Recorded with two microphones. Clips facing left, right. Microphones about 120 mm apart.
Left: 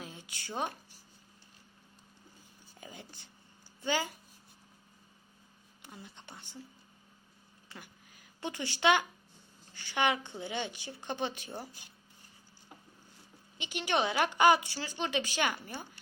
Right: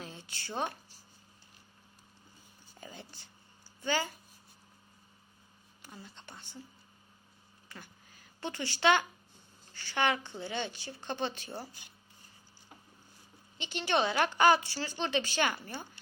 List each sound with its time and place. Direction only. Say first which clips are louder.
0.0 s a sound: right 1 dB; 10° left (ahead or behind)
2.8 s a sound: right 1 dB; 15° left (ahead or behind)
3.8 s speech: even; 15° left (ahead or behind)
5.8 s speech: even; 20° left (ahead or behind)
7.8 s a woman's voice: even; 15° left (ahead or behind)
13.6 s a woman's voice: right 1 dB; 10° left (ahead or behind)